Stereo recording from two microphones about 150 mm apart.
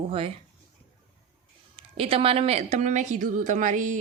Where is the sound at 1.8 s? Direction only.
40° right (ahead or behind).